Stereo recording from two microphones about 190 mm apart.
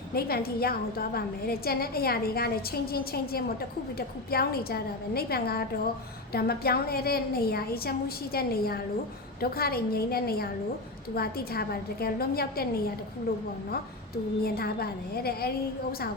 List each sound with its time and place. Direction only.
0.1 s a woman's voice: 55° left (ahead or behind)
14.4 s a woman's voice: 55° left (ahead or behind)